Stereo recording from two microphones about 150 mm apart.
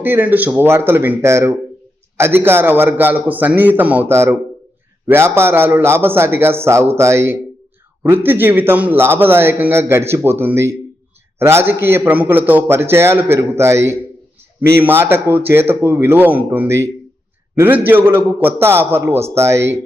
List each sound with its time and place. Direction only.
0.0 s a man's voice: 15° right (ahead or behind)